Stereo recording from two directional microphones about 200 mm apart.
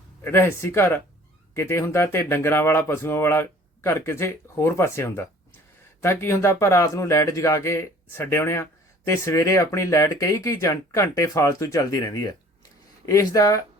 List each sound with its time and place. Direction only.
0.2 s speech: 10° left (ahead or behind)